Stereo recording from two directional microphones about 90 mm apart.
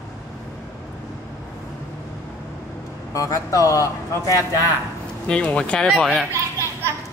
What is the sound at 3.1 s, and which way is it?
Speech, 40° left (ahead or behind).